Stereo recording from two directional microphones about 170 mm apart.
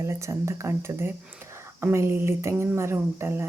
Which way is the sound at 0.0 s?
15° right (ahead or behind).